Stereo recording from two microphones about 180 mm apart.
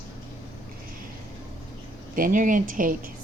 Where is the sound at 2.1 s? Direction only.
50° right (ahead or behind).